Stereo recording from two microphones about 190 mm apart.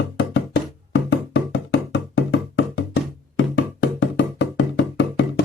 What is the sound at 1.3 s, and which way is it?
Music, 70° left (ahead or behind).